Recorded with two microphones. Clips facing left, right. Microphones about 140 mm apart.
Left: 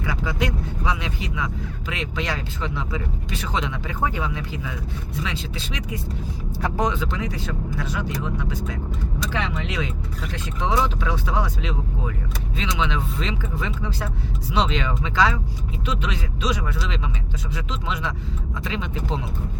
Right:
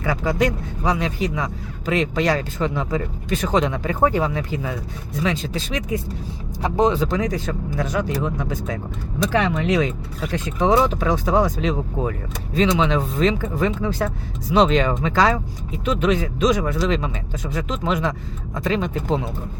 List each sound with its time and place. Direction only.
0.0 s speech: 45° right (ahead or behind)
6.6 s speech: 20° right (ahead or behind)
6.9 s speech: 40° right (ahead or behind)